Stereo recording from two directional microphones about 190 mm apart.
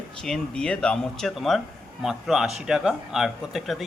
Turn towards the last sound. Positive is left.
turn(degrees=0)  # may be behind; listen again after turning